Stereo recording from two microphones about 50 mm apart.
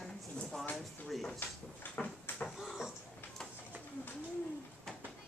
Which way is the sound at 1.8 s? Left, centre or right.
Left.